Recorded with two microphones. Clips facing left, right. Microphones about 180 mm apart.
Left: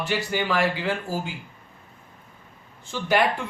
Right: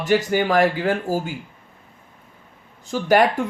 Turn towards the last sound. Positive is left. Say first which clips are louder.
# right 5 dB
turn(degrees=-45)  # may be behind; listen again after turning